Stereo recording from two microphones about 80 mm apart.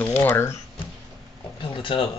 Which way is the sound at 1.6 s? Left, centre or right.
Left.